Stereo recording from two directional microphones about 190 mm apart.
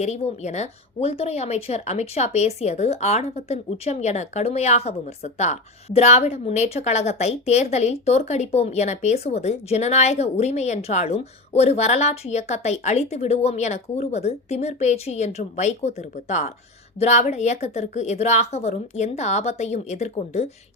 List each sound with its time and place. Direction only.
0.0 s speech: 35° left (ahead or behind)